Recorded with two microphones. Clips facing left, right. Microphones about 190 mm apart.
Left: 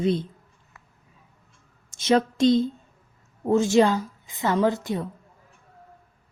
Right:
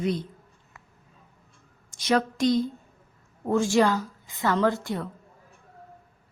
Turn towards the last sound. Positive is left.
turn(degrees=20)  # may be behind; listen again after turning